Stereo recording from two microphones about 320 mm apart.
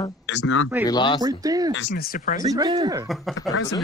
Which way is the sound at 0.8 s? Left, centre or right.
Centre.